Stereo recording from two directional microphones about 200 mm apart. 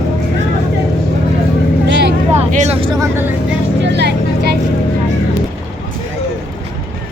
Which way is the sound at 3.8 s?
60° right (ahead or behind).